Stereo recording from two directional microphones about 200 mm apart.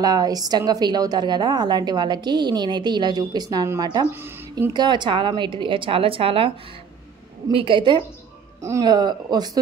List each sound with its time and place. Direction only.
0.0 s a woman's voice: 20° right (ahead or behind)